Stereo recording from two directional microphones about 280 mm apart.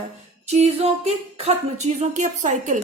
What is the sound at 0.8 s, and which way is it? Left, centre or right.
A woman's voice, right.